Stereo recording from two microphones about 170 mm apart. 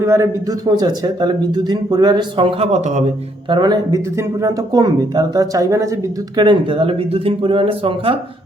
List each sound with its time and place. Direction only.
0.0 s a man's voice: 15° right (ahead or behind); by 3.0 s 45° right (ahead or behind)
3.5 s speech: 25° right (ahead or behind)